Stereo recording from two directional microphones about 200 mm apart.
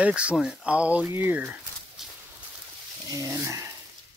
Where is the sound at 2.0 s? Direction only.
Centre (ahead or behind).